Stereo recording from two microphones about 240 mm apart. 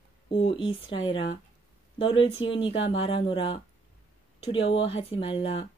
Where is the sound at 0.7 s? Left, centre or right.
Left.